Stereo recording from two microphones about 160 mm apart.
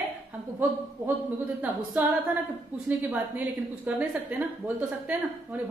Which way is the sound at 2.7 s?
15° right (ahead or behind).